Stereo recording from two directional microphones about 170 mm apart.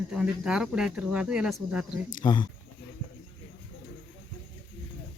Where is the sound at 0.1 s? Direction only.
5° right (ahead or behind).